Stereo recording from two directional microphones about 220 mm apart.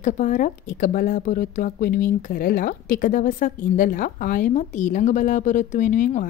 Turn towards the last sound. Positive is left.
turn(degrees=35)  # may be behind; listen again after turning